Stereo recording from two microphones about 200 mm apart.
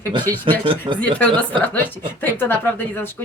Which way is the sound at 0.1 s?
20° right (ahead or behind).